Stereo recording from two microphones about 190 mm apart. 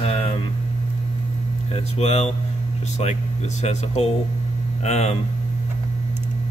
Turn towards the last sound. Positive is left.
turn(degrees=35)  # may be behind; listen again after turning